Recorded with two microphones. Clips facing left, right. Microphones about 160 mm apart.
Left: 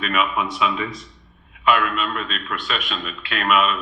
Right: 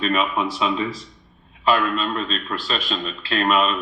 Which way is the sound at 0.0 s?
30° right (ahead or behind).